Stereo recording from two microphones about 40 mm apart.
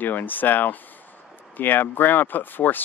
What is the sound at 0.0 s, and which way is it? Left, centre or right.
Speech, left.